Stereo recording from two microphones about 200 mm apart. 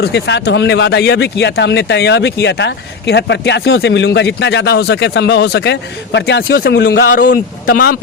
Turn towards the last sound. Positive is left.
turn(degrees=45)  # may be behind; listen again after turning